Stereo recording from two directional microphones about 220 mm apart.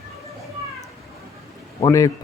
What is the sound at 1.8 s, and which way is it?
Speech, 15° left (ahead or behind).